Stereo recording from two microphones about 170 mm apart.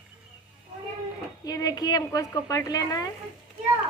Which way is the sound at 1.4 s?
20° left (ahead or behind).